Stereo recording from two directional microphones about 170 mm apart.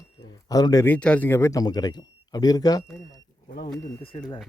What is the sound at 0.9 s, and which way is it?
A man's voice, 5° left (ahead or behind).